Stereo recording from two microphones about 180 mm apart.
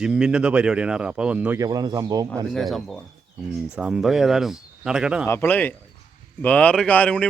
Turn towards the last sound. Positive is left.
turn(degrees=10)  # may be behind; listen again after turning